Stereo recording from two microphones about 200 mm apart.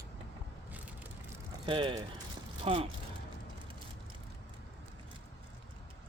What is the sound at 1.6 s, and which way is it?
Speech, 25° right (ahead or behind).